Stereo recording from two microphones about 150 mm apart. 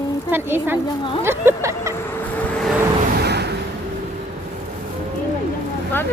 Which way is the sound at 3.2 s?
90° right.